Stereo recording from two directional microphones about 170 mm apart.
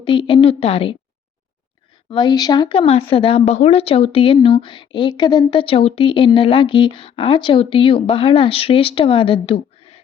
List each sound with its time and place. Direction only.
0.0 s speech: 30° left (ahead or behind)
2.0 s speech: 25° left (ahead or behind)